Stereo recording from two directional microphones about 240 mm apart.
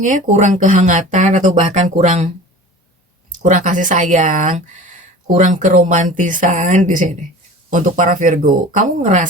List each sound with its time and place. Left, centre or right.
0.0 s speech: right
3.4 s speech: right